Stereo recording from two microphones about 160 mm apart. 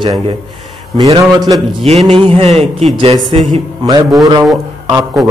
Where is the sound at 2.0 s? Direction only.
35° right (ahead or behind).